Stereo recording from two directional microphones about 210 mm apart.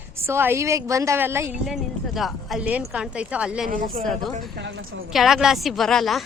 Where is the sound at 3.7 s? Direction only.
40° right (ahead or behind).